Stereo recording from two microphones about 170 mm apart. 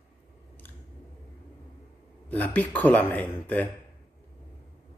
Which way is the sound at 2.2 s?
10° left (ahead or behind).